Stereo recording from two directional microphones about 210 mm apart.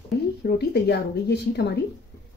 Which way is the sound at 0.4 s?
50° left (ahead or behind).